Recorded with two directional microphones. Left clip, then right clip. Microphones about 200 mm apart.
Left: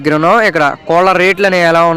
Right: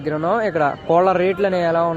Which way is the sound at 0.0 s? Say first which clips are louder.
Left 10 dB; 25° left (ahead or behind).